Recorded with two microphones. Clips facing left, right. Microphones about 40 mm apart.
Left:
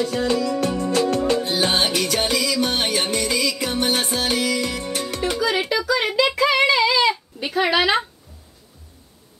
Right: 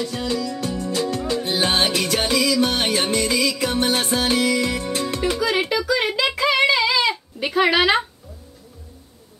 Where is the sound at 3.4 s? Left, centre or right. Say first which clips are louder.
Right 1 dB; centre.